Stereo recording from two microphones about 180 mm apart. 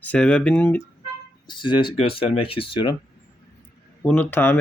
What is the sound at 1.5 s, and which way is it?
Speech, 25° left (ahead or behind).